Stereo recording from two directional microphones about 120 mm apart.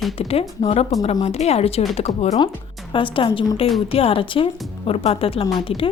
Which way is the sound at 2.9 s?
45° left (ahead or behind).